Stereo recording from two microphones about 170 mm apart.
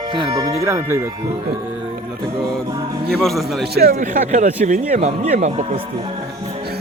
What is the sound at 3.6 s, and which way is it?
Speech, 65° right (ahead or behind).